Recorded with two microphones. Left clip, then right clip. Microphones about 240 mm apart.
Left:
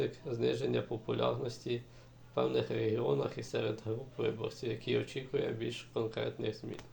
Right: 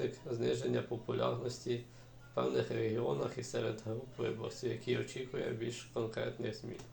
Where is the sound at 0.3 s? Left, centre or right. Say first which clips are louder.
Left 2 dB; left.